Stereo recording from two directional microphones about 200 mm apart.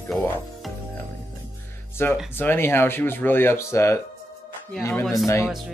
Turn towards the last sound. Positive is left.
turn(degrees=15)  # may be behind; listen again after turning